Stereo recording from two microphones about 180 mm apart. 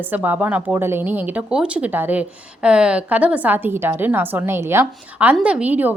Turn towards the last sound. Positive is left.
turn(degrees=-10)  # may be behind; listen again after turning